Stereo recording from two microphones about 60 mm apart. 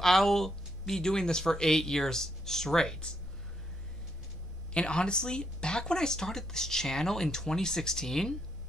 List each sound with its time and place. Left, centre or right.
0.0 s speech: centre
4.7 s speech: centre